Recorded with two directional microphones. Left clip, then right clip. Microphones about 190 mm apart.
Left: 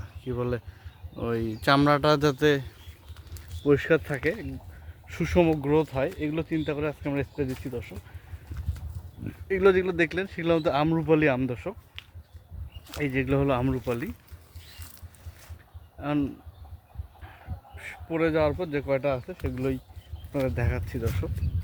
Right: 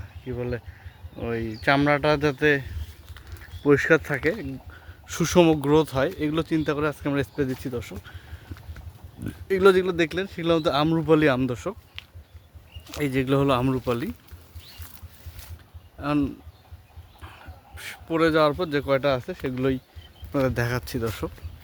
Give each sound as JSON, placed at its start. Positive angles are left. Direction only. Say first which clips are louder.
{"t": 0.3, "sound": "speech", "louder": "even", "side_deg": 25}
{"t": 3.6, "sound": "speech", "louder": "right 4 dB", "side_deg": -10}
{"t": 5.0, "sound": "speech", "louder": "right 4 dB", "side_deg": -25}
{"t": 9.2, "sound": "speech", "louder": "right 3 dB", "side_deg": -20}
{"t": 16.0, "sound": "speech", "louder": "right 3 dB", "side_deg": -20}
{"t": 17.7, "sound": "speech", "louder": "right 4 dB", "side_deg": -30}